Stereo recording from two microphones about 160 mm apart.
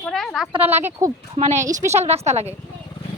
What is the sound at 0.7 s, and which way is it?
Speech, 15° right (ahead or behind).